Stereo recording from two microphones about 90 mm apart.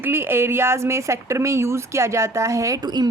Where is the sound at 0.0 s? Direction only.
25° right (ahead or behind).